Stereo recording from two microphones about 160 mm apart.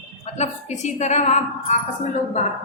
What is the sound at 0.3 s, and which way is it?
A woman's voice, 45° left (ahead or behind).